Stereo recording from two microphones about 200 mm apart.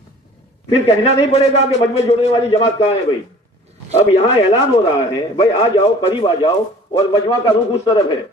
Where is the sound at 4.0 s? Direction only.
30° left (ahead or behind).